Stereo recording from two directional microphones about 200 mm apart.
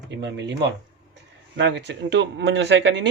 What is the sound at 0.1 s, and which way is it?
Speech, 60° right (ahead or behind).